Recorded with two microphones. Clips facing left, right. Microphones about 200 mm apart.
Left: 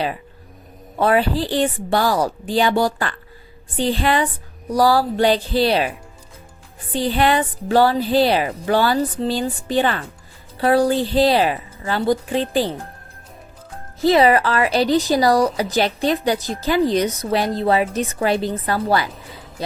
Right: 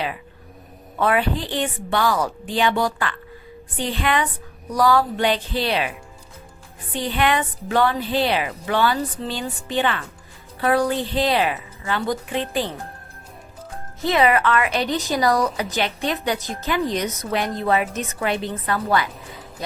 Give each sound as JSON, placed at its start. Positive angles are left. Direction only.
{"t": 0.9, "sound": "a woman's voice", "side_deg": 35}
{"t": 6.9, "sound": "a woman's voice", "side_deg": 35}
{"t": 14.0, "sound": "a woman's voice", "side_deg": 35}